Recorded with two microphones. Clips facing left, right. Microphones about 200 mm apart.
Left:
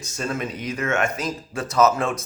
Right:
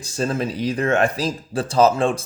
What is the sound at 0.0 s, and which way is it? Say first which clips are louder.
A man's voice: right 5 dB; 30° right (ahead or behind).